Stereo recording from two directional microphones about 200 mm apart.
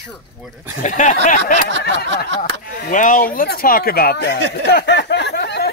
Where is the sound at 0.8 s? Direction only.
40° left (ahead or behind).